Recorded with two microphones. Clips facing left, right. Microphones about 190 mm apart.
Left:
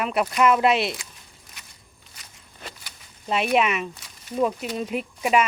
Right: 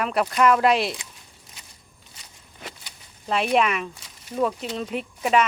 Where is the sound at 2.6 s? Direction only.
20° right (ahead or behind).